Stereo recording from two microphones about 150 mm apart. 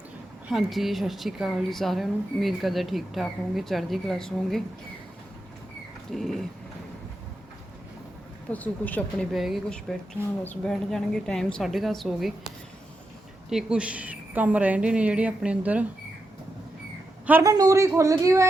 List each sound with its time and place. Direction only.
0.4 s speech: centre (ahead or behind)
6.1 s speech: centre (ahead or behind)
8.4 s a woman's voice: 10° left (ahead or behind)
13.5 s a woman's voice: 5° right (ahead or behind)
17.4 s a woman's voice: 25° right (ahead or behind)